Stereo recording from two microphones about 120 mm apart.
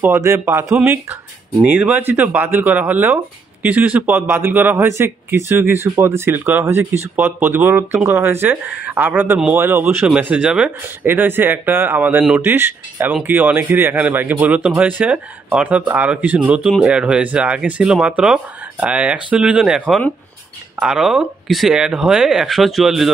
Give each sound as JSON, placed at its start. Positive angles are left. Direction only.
{"t": 0.0, "sound": "a man's voice", "side_deg": -20}